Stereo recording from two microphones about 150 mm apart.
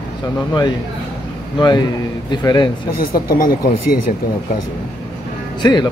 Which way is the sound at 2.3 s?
30° left (ahead or behind).